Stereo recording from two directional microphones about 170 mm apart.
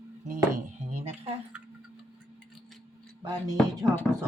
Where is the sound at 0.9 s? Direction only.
40° right (ahead or behind).